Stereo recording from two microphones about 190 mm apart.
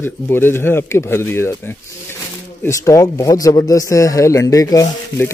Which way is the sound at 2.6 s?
15° left (ahead or behind).